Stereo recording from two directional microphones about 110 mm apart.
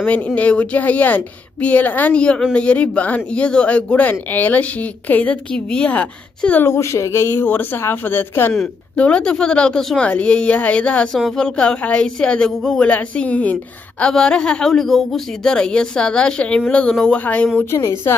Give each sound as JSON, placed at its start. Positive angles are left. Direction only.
{"t": 0.0, "sound": "speech", "side_deg": 10}
{"t": 6.7, "sound": "speech", "side_deg": 25}
{"t": 17.6, "sound": "speech", "side_deg": 25}